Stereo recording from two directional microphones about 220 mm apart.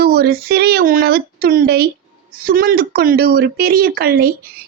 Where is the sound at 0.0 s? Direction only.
45° right (ahead or behind).